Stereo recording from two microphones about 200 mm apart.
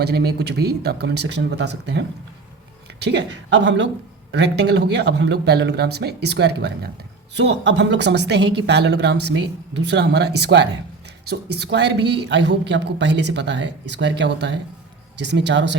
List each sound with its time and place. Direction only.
0.0 s a woman's voice: 55° right (ahead or behind)